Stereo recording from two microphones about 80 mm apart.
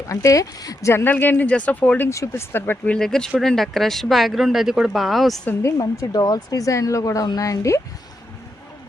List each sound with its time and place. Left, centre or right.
0.1 s speech: left
0.9 s speech: left
2.0 s speech: left
2.9 s speech: centre
5.7 s speech: left